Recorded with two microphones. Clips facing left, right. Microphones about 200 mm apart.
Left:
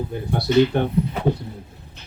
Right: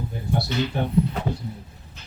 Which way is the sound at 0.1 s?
65° left (ahead or behind).